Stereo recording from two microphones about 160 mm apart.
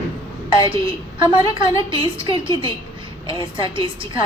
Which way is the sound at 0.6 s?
30° right (ahead or behind).